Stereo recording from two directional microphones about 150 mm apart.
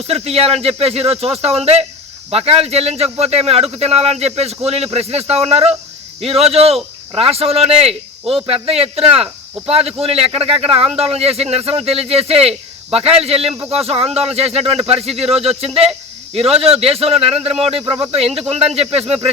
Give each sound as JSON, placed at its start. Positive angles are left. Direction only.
{"t": 0.1, "sound": "speech", "side_deg": -40}